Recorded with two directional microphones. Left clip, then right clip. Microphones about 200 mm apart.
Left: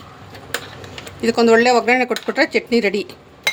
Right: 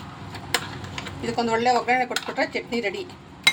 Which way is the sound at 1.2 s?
55° left (ahead or behind).